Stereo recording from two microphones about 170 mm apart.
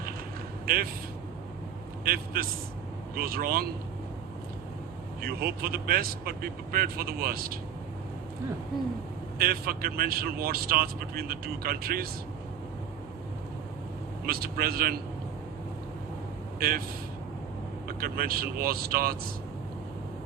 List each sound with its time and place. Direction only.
0.6 s a man's voice: 60° right (ahead or behind)
2.0 s speech: 60° right (ahead or behind)
5.2 s speech: 65° right (ahead or behind)
9.4 s speech: 60° right (ahead or behind)
14.3 s speech: 60° right (ahead or behind)
16.6 s speech: 65° right (ahead or behind)
17.8 s speech: 60° right (ahead or behind)